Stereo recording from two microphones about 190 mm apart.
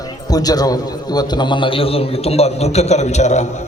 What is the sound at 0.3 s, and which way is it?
A man's voice, 20° left (ahead or behind).